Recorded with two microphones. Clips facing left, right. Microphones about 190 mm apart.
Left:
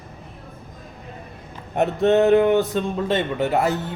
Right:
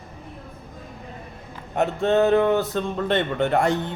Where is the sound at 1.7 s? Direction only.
20° left (ahead or behind).